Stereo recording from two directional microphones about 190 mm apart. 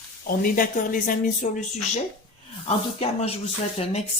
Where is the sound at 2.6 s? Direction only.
30° left (ahead or behind).